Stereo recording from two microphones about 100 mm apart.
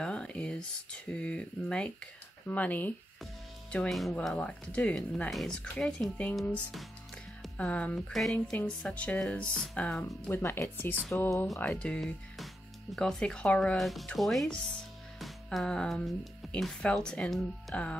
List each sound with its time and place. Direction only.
0.0 s speech: 10° left (ahead or behind)
3.9 s speech: centre (ahead or behind)
7.5 s speech: 15° left (ahead or behind)
8.1 s speech: 5° left (ahead or behind)
10.2 s speech: 20° left (ahead or behind)
11.6 s speech: 10° left (ahead or behind)
13.7 s speech: centre (ahead or behind)